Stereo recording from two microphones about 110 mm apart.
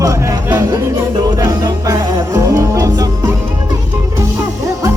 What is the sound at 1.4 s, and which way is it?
Music, 35° right (ahead or behind).